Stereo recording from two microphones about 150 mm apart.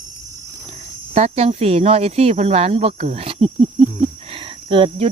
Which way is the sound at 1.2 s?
45° right (ahead or behind).